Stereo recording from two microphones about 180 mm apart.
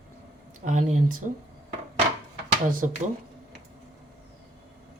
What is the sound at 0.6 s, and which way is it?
Speech, 40° right (ahead or behind).